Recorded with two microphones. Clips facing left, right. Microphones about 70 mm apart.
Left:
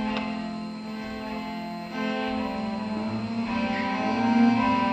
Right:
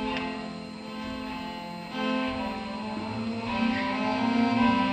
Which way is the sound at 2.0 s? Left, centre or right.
Centre.